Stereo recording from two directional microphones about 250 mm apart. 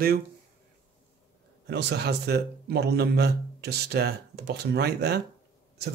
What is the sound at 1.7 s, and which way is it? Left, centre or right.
Speech, right.